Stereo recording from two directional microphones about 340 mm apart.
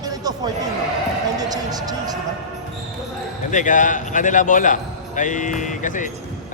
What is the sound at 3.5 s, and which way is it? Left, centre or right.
A man's voice, left.